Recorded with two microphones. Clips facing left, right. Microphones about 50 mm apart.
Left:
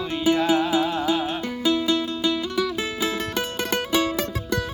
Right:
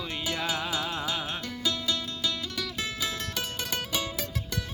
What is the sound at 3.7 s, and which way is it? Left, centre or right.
Music, left.